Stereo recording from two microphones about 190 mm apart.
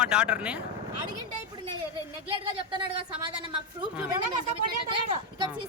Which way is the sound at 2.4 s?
25° right (ahead or behind).